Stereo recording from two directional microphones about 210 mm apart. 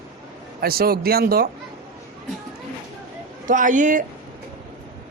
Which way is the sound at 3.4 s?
40° right (ahead or behind).